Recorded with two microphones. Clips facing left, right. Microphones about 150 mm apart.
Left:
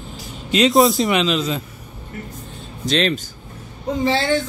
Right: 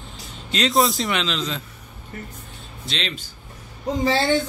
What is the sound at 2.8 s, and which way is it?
Speech, 45° left (ahead or behind).